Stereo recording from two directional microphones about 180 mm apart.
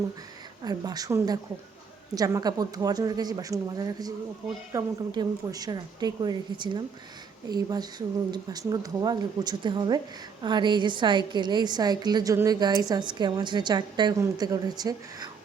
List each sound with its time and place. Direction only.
0.6 s a woman's voice: 20° right (ahead or behind)